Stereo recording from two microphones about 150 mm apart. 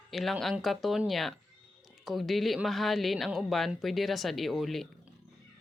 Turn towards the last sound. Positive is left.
turn(degrees=0)  # may be behind; listen again after turning